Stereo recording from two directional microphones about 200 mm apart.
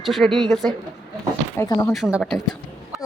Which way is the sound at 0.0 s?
Centre (ahead or behind).